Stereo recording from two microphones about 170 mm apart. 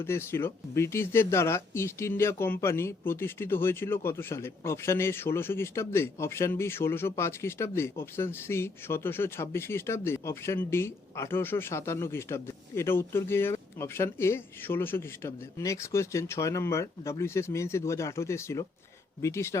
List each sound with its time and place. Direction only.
0.0 s speech: 15° left (ahead or behind)